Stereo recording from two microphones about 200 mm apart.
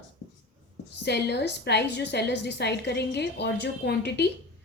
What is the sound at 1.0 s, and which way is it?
A woman's voice, 55° left (ahead or behind).